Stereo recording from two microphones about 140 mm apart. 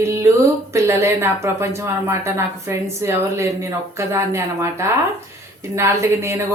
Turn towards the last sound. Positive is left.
turn(degrees=-20)  # may be behind; listen again after turning